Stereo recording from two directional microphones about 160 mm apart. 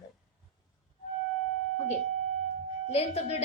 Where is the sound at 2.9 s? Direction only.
40° left (ahead or behind).